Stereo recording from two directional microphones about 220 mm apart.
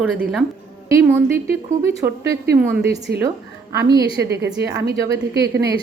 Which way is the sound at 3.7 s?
15° right (ahead or behind).